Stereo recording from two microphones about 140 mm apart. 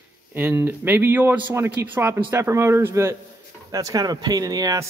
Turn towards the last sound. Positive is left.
turn(degrees=-25)  # may be behind; listen again after turning